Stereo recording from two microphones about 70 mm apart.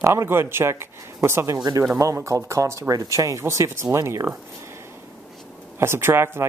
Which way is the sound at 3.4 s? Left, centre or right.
Right.